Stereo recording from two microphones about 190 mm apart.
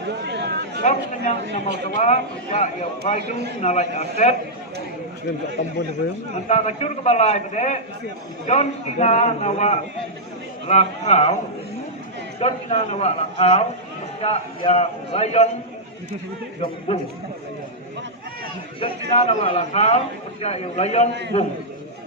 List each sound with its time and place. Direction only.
0.1 s chatter: 60° right (ahead or behind)
0.8 s a man's voice: 40° left (ahead or behind)
1.7 s a man's voice: 65° right (ahead or behind)
2.0 s a man's voice: 40° left (ahead or behind)
6.5 s a man's voice: 35° left (ahead or behind)
12.4 s a man's voice: 35° left (ahead or behind)
18.8 s a man's voice: 35° left (ahead or behind)
21.1 s a man's voice: 65° right (ahead or behind)